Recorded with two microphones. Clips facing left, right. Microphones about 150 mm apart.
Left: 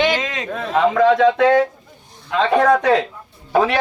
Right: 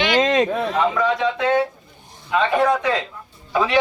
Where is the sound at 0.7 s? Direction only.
85° left.